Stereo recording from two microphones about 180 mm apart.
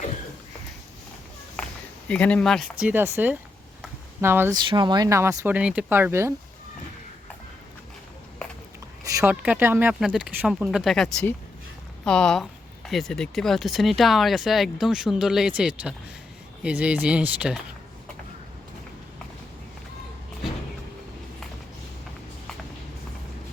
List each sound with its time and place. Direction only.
2.0 s speech: 5° left (ahead or behind)
2.8 s speech: 10° right (ahead or behind)
4.6 s speech: 25° right (ahead or behind)
9.0 s a sound: 20° right (ahead or behind)
9.3 s speech: 5° right (ahead or behind)